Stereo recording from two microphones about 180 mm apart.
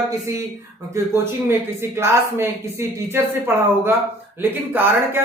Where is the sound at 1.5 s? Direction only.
15° right (ahead or behind).